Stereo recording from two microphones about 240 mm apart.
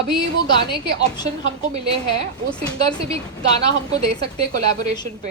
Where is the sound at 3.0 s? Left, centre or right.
Right.